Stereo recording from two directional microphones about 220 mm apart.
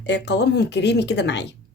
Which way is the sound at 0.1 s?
50° left (ahead or behind).